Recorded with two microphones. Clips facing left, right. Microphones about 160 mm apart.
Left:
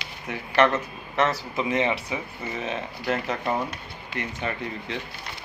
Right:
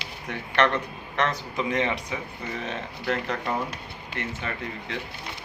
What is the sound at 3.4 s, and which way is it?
Speech, 20° left (ahead or behind).